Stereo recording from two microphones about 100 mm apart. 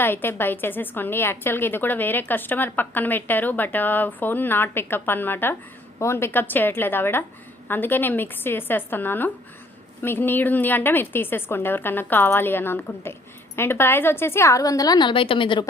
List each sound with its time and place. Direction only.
0.0 s a woman's voice: 20° left (ahead or behind); by 15.6 s 55° left (ahead or behind)